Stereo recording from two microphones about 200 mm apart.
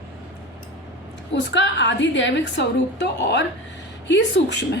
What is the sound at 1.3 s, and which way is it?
A woman's voice, 60° left (ahead or behind).